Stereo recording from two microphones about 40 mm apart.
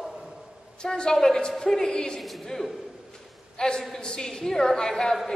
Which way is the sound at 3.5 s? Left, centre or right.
Centre.